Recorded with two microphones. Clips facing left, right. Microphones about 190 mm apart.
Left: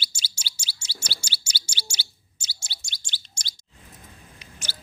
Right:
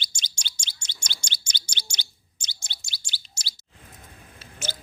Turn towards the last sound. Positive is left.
turn(degrees=15)  # may be behind; listen again after turning